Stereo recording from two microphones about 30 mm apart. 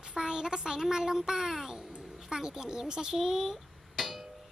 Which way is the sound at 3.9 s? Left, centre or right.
Centre.